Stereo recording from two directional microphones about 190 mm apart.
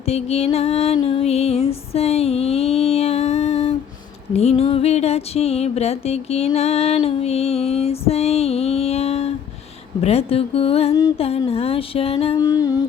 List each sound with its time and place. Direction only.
0.1 s music: 30° left (ahead or behind)
12.4 s music: 20° left (ahead or behind)